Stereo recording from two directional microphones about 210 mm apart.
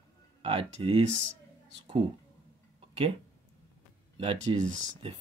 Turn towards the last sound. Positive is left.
turn(degrees=-30)  # may be behind; listen again after turning